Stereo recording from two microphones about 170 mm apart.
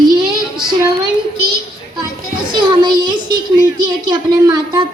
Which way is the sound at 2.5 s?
25° right (ahead or behind).